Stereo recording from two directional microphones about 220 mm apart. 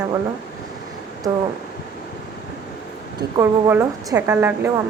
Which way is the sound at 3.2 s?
15° right (ahead or behind).